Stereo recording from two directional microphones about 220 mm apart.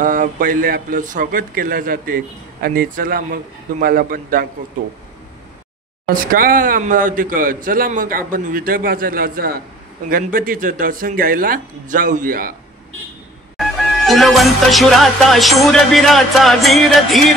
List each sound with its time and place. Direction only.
0.0 s a man's voice: 35° right (ahead or behind)
6.0 s a man's voice: 40° right (ahead or behind)
13.6 s music: centre (ahead or behind)